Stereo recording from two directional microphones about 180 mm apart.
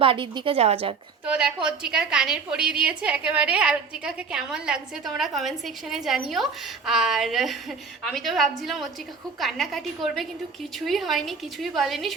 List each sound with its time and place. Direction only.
0.0 s a woman's voice: 30° right (ahead or behind)
1.2 s a woman's voice: 5° right (ahead or behind)